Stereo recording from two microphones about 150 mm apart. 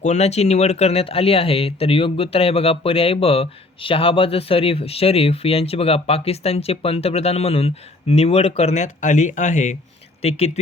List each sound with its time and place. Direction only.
0.0 s speech: 50° left (ahead or behind)
10.2 s speech: 40° left (ahead or behind)